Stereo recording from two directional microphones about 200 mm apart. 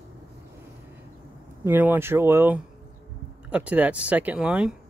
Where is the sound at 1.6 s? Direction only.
10° right (ahead or behind).